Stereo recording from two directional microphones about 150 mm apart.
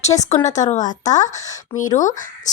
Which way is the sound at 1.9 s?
55° left (ahead or behind).